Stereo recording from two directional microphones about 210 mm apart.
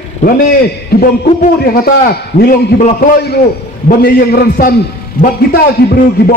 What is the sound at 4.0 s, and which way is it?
A man's voice, 45° left (ahead or behind).